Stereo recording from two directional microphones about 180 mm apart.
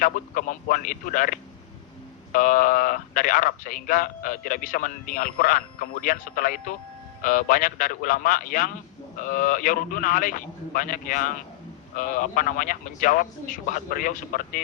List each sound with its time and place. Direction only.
0.0 s a man's voice: 50° left (ahead or behind)